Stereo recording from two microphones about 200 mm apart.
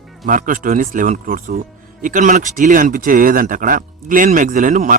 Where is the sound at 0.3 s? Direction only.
40° right (ahead or behind).